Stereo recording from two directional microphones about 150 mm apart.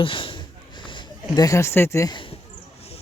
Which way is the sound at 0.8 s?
30° left (ahead or behind).